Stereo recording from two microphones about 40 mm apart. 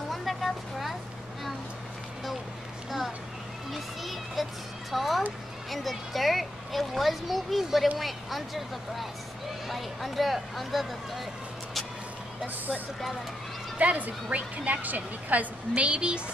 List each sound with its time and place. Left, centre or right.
0.1 s a sound: centre
3.7 s children playing: centre
4.9 s a child's voice: centre
13.7 s a woman's voice: right